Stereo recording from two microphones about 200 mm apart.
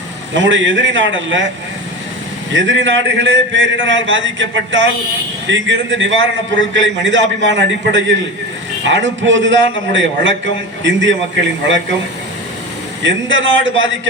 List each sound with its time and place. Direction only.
0.3 s a man's voice: 70° right (ahead or behind)
2.5 s a man's voice: 70° right (ahead or behind)
13.0 s a man's voice: 70° right (ahead or behind)